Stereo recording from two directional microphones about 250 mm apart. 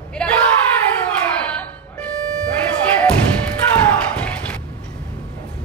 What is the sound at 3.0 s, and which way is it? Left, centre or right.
Thump, centre.